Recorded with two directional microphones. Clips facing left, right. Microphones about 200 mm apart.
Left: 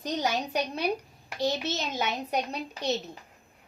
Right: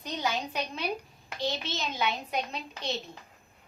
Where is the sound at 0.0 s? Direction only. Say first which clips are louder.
Left 3 dB; 45° left (ahead or behind).